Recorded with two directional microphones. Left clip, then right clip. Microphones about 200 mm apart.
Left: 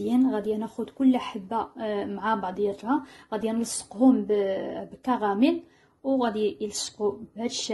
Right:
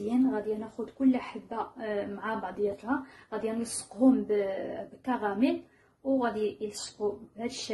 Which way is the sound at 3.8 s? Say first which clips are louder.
Left 3 dB; 30° left (ahead or behind).